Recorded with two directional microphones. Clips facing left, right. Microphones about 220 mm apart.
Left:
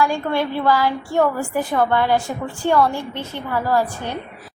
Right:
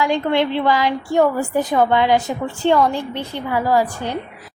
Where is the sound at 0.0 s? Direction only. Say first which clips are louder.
Right 2 dB; 20° right (ahead or behind).